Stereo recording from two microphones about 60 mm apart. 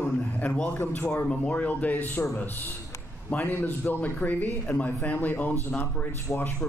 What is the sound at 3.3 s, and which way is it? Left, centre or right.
A man's voice, left.